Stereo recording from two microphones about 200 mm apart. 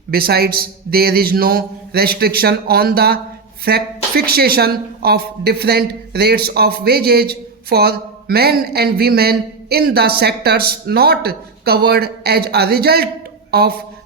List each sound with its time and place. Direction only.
0.1 s speech: 50° right (ahead or behind)